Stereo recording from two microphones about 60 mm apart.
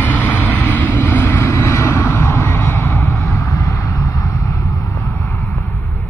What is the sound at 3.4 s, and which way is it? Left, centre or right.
Vehicle, left.